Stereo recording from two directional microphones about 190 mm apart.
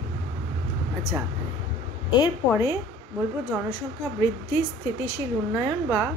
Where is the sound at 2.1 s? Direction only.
25° left (ahead or behind).